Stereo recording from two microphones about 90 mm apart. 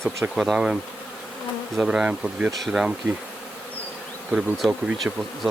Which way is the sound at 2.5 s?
Centre (ahead or behind).